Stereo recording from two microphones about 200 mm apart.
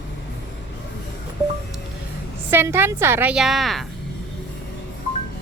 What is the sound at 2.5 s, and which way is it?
A woman's voice, 10° right (ahead or behind).